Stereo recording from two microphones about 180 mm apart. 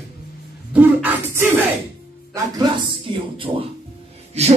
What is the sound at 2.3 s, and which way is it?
A man's voice, 20° right (ahead or behind).